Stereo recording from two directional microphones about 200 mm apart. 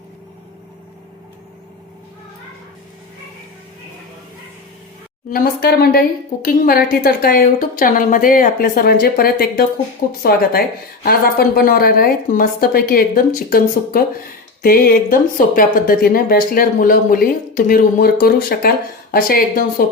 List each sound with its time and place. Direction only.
5.3 s speech: 50° left (ahead or behind)